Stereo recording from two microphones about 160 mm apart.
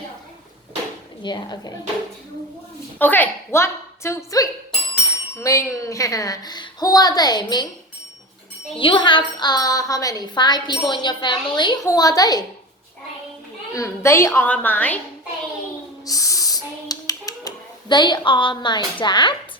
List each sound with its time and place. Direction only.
1.2 s a woman's voice: 25° left (ahead or behind)
3.0 s a woman's voice: 10° left (ahead or behind)
8.8 s a woman's voice: 30° left (ahead or behind)
13.7 s a woman's voice: 20° left (ahead or behind)
16.0 s a sound: 20° left (ahead or behind)
18.3 s a woman's voice: 30° left (ahead or behind)